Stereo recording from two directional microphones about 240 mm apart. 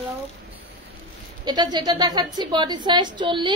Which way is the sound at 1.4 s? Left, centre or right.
Centre.